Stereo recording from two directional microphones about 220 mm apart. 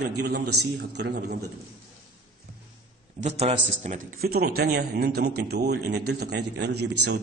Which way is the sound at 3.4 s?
30° right (ahead or behind).